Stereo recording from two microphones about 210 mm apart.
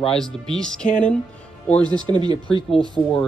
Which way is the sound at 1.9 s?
20° right (ahead or behind).